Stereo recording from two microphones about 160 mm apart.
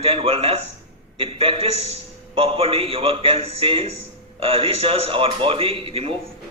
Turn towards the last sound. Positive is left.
turn(degrees=-35)  # may be behind; listen again after turning